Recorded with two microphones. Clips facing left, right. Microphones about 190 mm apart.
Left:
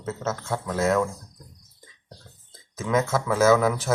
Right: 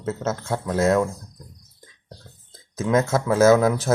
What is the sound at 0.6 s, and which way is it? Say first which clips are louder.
Speech: right 3 dB; 20° right (ahead or behind).